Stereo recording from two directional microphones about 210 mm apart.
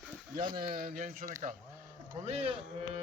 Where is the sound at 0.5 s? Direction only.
45° right (ahead or behind).